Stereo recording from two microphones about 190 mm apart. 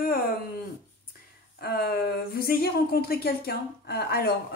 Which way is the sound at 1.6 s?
55° left (ahead or behind).